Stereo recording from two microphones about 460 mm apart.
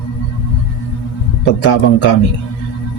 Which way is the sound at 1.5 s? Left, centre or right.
Left.